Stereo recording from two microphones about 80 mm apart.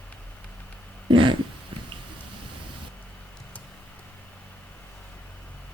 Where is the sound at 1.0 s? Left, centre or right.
Right.